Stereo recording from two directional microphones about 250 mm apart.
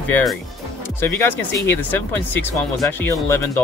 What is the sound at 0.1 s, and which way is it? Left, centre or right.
Speech, centre.